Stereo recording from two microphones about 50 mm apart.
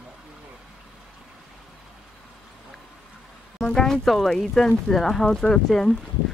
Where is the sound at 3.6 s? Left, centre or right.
Centre.